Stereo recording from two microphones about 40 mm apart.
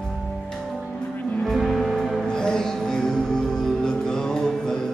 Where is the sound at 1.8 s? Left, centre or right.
Centre.